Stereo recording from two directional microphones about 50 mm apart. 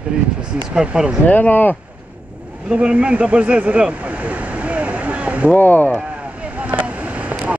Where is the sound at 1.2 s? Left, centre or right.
Left.